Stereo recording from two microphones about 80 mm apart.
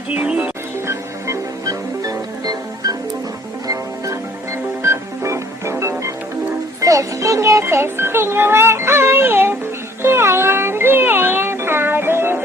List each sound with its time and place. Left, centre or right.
0.1 s music: centre
0.9 s music: right
6.8 s music: right